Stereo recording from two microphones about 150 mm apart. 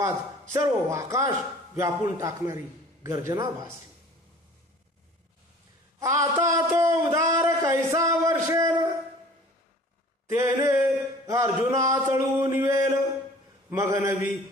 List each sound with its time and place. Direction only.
0.0 s speech: 20° right (ahead or behind)
6.0 s a man's voice: 20° right (ahead or behind)
10.3 s speech: 20° right (ahead or behind)